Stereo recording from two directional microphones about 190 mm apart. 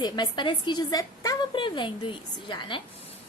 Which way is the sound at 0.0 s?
25° left (ahead or behind).